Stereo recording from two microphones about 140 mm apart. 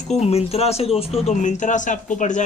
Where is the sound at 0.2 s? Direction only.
45° left (ahead or behind).